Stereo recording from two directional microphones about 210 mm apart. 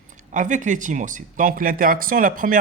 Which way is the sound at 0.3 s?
35° right (ahead or behind).